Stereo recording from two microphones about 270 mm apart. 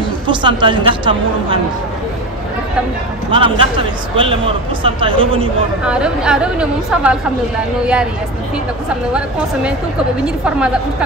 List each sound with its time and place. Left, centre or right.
0.3 s a woman's voice: centre
3.3 s a man's voice: centre
5.9 s speech: centre
9.1 s speech: centre